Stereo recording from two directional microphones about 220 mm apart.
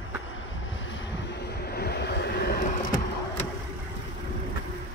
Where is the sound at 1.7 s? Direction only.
45° left (ahead or behind).